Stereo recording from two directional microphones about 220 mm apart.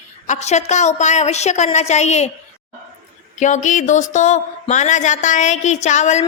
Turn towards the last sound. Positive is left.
turn(degrees=30)  # may be behind; listen again after turning